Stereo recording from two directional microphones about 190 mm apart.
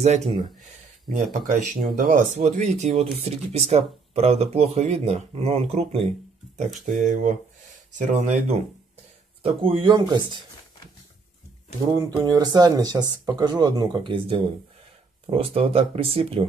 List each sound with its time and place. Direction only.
0.0 s speech: 35° right (ahead or behind)
11.8 s speech: 20° right (ahead or behind)